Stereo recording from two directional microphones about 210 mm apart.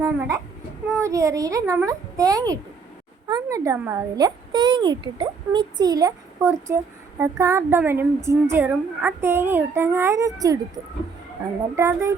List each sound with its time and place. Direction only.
0.3 s a woman's voice: 15° right (ahead or behind)
11.8 s a woman's voice: 15° right (ahead or behind)